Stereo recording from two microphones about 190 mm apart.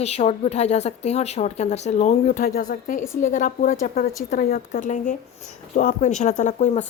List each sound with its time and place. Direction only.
0.0 s a woman's voice: 35° left (ahead or behind)